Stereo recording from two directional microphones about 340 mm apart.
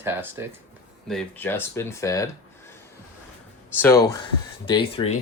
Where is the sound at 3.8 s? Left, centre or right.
Centre.